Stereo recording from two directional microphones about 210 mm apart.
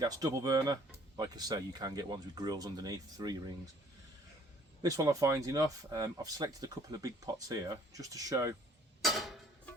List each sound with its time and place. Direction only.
0.0 s speech: 15° right (ahead or behind)
4.8 s speech: 15° right (ahead or behind)
9.0 s tick-tock: centre (ahead or behind)